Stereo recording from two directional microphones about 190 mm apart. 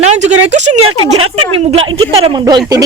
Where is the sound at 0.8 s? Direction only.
90° right.